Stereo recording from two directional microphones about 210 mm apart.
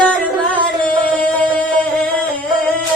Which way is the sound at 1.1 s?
5° left (ahead or behind).